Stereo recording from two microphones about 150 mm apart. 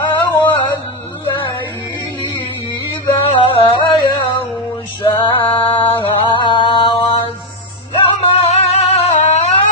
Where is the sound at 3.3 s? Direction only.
35° left (ahead or behind).